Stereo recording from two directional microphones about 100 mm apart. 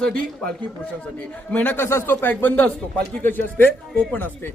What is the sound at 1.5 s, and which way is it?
Speech, 15° left (ahead or behind).